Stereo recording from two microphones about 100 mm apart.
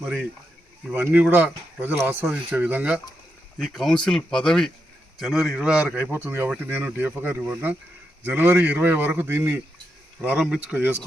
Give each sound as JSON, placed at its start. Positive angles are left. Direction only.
{"t": 0.0, "sound": "a man's voice", "side_deg": -15}
{"t": 3.6, "sound": "a man's voice", "side_deg": 0}
{"t": 6.1, "sound": "a man's voice", "side_deg": -20}
{"t": 10.2, "sound": "speech", "side_deg": -10}